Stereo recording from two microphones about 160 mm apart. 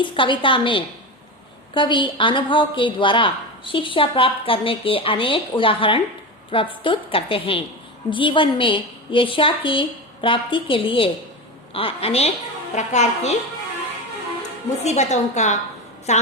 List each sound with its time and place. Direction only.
0.0 s a woman's voice: 30° left (ahead or behind); by 13.3 s 45° left (ahead or behind)
14.8 s a woman's voice: 45° left (ahead or behind)